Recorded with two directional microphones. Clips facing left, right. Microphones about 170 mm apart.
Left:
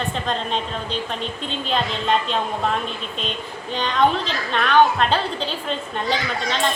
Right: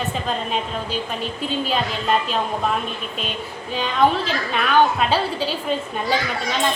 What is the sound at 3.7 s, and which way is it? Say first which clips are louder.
A woman's voice: right 1 dB; 5° right (ahead or behind).